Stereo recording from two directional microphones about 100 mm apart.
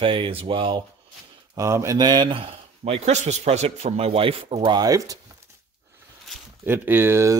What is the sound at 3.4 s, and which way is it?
Speech, 90° right.